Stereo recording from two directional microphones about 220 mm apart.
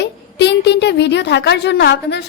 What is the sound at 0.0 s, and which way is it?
A woman's voice, 50° left (ahead or behind).